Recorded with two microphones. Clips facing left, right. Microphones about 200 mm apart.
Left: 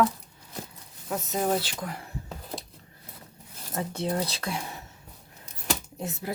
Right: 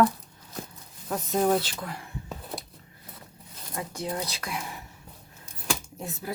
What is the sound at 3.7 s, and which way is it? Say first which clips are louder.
Speech: left 3 dB; 30° left (ahead or behind).